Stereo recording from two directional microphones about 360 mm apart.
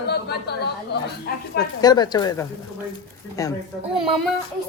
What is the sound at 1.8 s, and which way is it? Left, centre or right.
Speech, centre.